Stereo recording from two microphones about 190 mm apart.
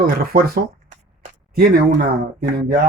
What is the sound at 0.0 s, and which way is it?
Speech, 50° right (ahead or behind).